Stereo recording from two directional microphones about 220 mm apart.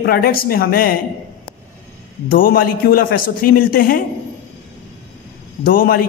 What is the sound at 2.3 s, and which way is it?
A man's voice, 40° left (ahead or behind).